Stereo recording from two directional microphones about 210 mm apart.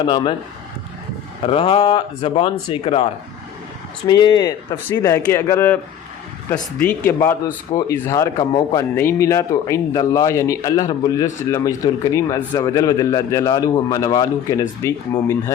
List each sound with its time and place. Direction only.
0.0 s speech: 25° left (ahead or behind)
1.5 s speech: 25° left (ahead or behind)